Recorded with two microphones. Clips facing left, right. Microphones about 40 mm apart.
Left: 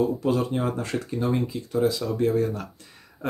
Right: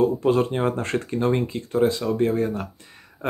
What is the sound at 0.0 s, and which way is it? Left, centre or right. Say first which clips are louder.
Speech: right 4 dB; right.